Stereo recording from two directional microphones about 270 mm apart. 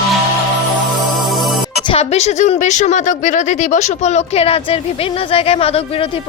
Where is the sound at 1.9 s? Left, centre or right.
Left.